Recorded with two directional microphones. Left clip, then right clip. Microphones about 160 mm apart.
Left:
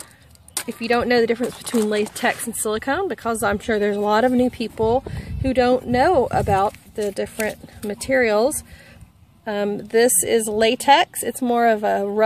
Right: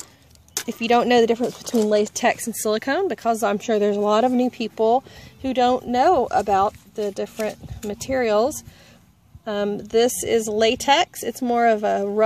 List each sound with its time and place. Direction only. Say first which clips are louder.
0.7 s speech: right 2 dB; 45° right (ahead or behind)
1.7 s speech: even; 10° left (ahead or behind)
2.2 s speech: right 1 dB; 45° right (ahead or behind); by 3.5 s 25° right (ahead or behind)
3.5 s speech: even; 15° right (ahead or behind)
5.4 s speech: left 1 dB; 5° right (ahead or behind)